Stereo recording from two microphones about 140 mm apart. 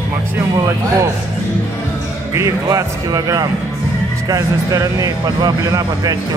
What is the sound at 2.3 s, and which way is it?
Speech, 20° right (ahead or behind).